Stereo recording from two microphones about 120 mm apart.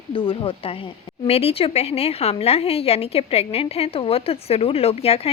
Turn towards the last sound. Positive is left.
turn(degrees=55)  # may be behind; listen again after turning